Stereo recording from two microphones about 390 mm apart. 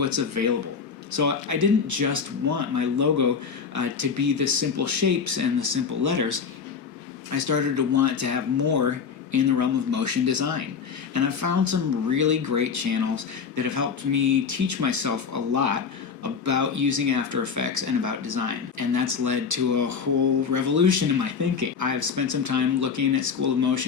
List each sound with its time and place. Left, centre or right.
0.0 s speech: right